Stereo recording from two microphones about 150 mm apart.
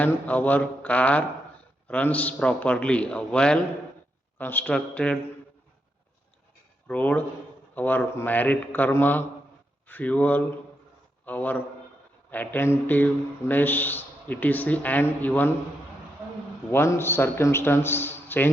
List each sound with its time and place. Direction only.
0.0 s speech: 10° left (ahead or behind)
6.8 s speech: 10° left (ahead or behind)
16.7 s speech: 15° left (ahead or behind)